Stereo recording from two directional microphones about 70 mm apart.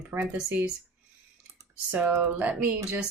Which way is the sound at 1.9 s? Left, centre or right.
Right.